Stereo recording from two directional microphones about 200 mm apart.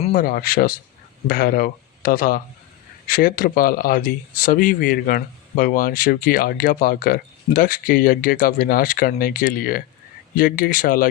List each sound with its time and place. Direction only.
0.1 s speech: 45° left (ahead or behind)